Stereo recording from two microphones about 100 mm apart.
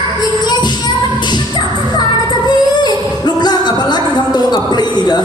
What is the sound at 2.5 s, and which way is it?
Music, 45° left (ahead or behind).